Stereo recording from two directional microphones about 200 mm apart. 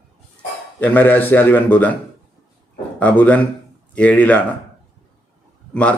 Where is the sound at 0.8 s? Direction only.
10° left (ahead or behind).